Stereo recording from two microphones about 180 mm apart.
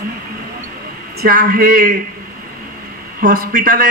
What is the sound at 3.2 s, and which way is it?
Speech, 50° right (ahead or behind).